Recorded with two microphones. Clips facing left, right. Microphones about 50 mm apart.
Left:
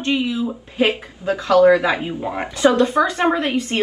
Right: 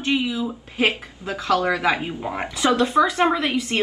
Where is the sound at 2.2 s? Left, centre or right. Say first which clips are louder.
Left 3 dB; centre.